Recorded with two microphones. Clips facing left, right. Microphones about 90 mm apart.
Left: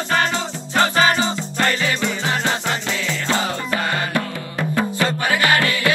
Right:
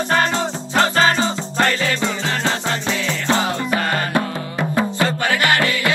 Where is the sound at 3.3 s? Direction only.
20° right (ahead or behind).